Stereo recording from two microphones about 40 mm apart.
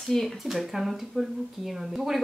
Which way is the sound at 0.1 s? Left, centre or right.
Centre.